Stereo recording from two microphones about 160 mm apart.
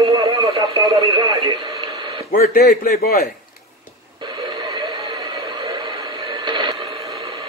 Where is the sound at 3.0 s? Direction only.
65° left (ahead or behind).